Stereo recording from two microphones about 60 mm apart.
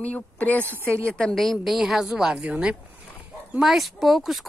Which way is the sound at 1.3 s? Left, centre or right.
Centre.